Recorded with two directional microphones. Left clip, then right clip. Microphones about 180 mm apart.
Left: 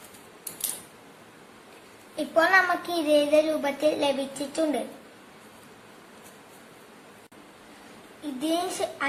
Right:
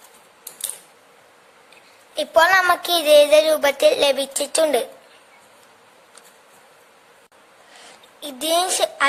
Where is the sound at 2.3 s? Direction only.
65° right (ahead or behind).